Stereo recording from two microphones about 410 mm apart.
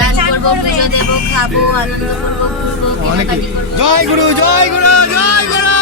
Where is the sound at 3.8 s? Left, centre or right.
Right.